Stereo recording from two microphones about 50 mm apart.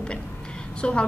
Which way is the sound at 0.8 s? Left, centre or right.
Left.